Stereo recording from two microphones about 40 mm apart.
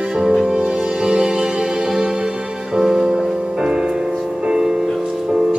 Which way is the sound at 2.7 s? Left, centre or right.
Centre.